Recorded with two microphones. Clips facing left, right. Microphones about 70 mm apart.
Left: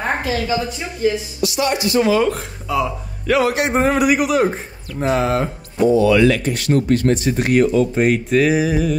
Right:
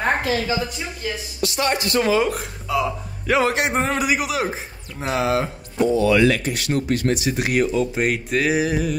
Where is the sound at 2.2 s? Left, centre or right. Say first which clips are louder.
Left 4 dB; centre.